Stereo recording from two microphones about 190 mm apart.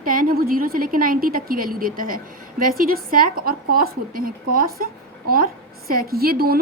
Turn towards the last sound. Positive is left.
turn(degrees=-55)  # may be behind; listen again after turning